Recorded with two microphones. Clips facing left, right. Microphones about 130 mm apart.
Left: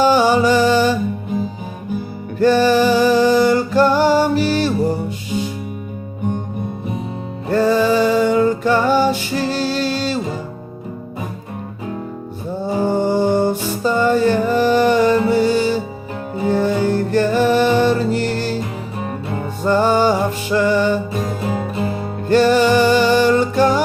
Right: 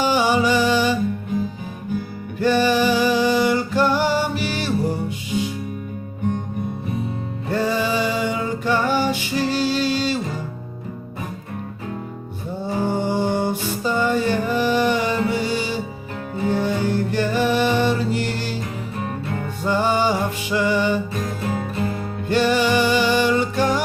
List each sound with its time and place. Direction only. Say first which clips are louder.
0.0 s music: left 5 dB; 45° left (ahead or behind)
2.4 s music: left 5 dB; 40° left (ahead or behind)
7.5 s music: left 7 dB; 40° left (ahead or behind)
12.8 s music: left 5 dB; 40° left (ahead or behind)
19.6 s music: left 5 dB; 45° left (ahead or behind)
21.4 s music: left 3 dB; 25° left (ahead or behind)
22.3 s music: left 5 dB; 40° left (ahead or behind)